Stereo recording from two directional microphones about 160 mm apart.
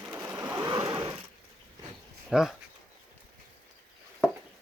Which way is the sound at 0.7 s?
30° right (ahead or behind).